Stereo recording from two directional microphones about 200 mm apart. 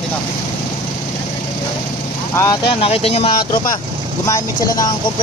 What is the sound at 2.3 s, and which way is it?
Speech, 15° left (ahead or behind).